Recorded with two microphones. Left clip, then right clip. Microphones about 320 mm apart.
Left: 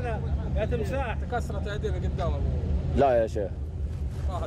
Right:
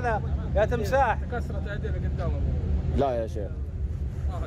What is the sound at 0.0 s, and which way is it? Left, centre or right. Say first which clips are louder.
Vehicle: right 6 dB; centre.